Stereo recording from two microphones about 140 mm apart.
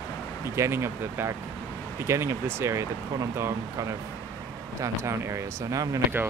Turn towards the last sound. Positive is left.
turn(degrees=-20)  # may be behind; listen again after turning